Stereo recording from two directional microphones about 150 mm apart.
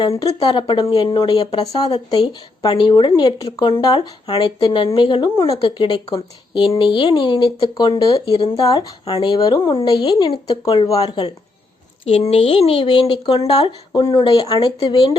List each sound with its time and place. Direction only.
0.3 s speech: 35° left (ahead or behind)
8.6 s speech: 25° left (ahead or behind)
9.0 s speech: 35° left (ahead or behind)
12.3 s speech: 40° left (ahead or behind)
14.3 s speech: 25° left (ahead or behind)